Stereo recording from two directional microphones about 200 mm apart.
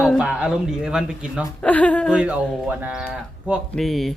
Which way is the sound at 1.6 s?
5° left (ahead or behind).